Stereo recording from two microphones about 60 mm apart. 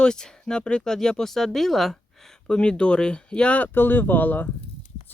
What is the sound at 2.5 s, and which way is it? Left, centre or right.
Speech, centre.